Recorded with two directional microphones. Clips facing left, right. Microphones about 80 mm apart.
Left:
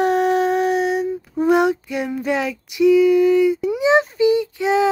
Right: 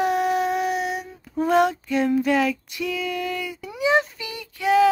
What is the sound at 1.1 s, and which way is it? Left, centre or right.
Female singing, centre.